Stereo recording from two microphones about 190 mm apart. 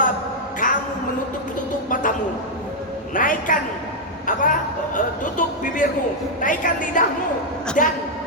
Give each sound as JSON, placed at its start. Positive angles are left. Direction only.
{"t": 0.6, "sound": "music", "side_deg": 45}
{"t": 1.9, "sound": "a sound", "side_deg": 45}
{"t": 3.2, "sound": "a man's voice", "side_deg": 45}